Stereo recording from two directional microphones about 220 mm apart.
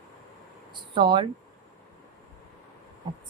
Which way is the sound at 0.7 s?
20° right (ahead or behind).